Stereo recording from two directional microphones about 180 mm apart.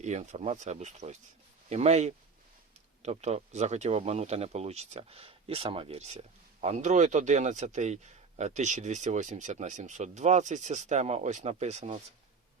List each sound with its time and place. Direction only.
0.0 s speech: 40° right (ahead or behind)